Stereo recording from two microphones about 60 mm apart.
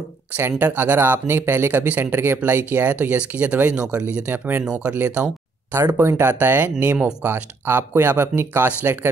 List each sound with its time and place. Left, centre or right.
0.6 s speech: right
5.7 s speech: right